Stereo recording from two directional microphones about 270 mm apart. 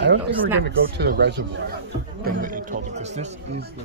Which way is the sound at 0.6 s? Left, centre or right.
Right.